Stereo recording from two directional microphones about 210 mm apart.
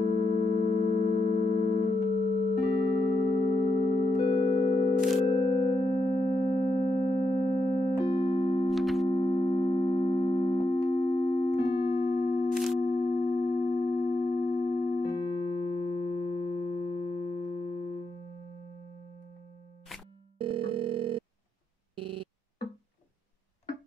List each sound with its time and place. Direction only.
0.0 s music: 25° left (ahead or behind)
3.7 s music: 25° left (ahead or behind)
8.6 s music: centre (ahead or behind)
9.1 s music: 20° left (ahead or behind)
12.8 s sine wave: 30° left (ahead or behind)
20.3 s telephone: 25° right (ahead or behind)
21.9 s busy signal: 25° right (ahead or behind)